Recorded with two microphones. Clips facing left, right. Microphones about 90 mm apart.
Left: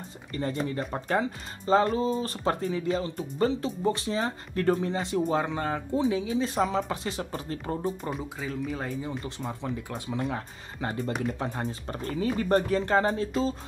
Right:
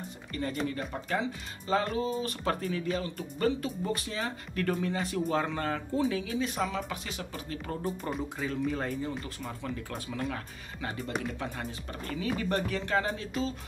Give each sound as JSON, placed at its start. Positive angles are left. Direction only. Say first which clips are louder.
{"t": 0.3, "sound": "speech", "louder": "left 3 dB", "side_deg": 25}
{"t": 8.1, "sound": "speech", "louder": "even", "side_deg": 0}
{"t": 9.2, "sound": "speech", "louder": "left 4 dB", "side_deg": 25}
{"t": 10.3, "sound": "speech", "louder": "left 4 dB", "side_deg": 35}